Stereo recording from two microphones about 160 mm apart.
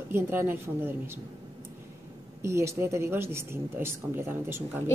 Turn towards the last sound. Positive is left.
turn(degrees=-15)  # may be behind; listen again after turning